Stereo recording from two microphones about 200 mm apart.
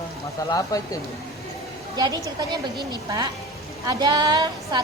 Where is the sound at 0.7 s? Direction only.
15° left (ahead or behind).